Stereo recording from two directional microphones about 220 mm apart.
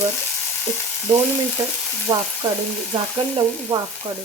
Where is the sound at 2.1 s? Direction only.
15° right (ahead or behind).